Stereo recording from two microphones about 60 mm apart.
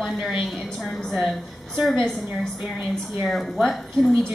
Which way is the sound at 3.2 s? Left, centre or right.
Centre.